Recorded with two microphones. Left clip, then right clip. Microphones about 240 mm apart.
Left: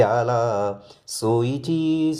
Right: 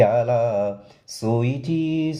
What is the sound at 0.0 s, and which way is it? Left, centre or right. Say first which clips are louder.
Speech: right 1 dB; left.